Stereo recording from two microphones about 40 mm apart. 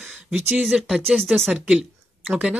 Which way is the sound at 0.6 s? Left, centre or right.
Centre.